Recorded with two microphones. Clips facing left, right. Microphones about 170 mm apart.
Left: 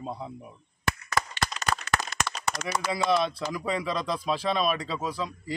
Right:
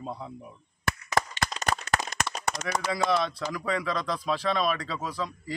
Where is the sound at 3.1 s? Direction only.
20° left (ahead or behind).